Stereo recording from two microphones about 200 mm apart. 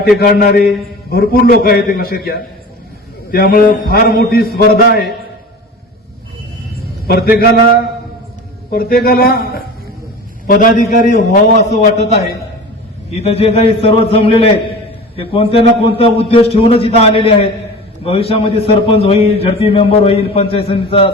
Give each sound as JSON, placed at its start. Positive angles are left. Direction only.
{"t": 0.2, "sound": "a man's voice", "side_deg": 50}
{"t": 7.1, "sound": "a man's voice", "side_deg": 50}
{"t": 13.2, "sound": "a man's voice", "side_deg": 30}